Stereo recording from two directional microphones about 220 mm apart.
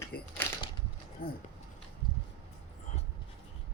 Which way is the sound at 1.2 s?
40° left (ahead or behind).